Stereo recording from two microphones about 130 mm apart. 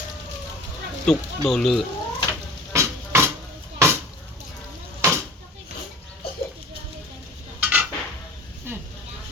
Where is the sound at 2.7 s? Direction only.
20° right (ahead or behind).